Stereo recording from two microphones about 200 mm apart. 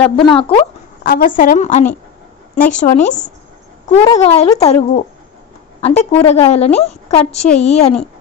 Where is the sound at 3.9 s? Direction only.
25° left (ahead or behind).